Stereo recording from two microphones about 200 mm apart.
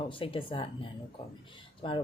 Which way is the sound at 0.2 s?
25° left (ahead or behind).